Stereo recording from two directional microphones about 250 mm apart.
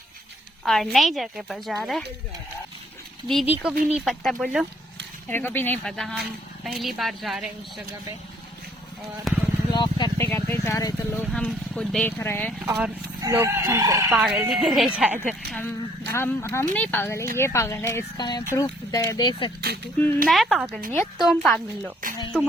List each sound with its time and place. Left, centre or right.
0.6 s a woman's voice: centre
3.2 s a woman's voice: centre
9.3 s a woman's voice: centre
9.7 s speech: centre
12.6 s a woman's voice: centre
15.5 s speech: centre
20.2 s a woman's voice: centre